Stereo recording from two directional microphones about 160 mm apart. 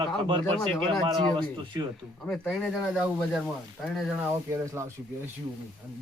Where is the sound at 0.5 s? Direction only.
5° left (ahead or behind).